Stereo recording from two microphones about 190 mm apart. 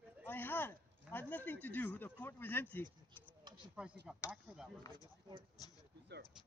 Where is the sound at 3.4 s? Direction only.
25° right (ahead or behind).